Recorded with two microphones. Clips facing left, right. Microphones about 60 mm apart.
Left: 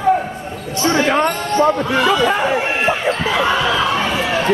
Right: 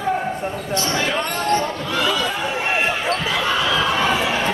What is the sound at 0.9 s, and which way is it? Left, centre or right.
Basketball bounce, left.